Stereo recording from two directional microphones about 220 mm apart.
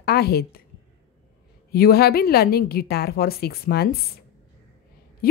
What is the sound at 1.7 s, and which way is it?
A woman's voice, 45° left (ahead or behind).